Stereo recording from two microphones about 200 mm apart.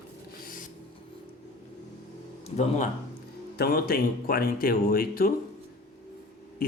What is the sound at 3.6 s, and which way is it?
Speech, 50° left (ahead or behind).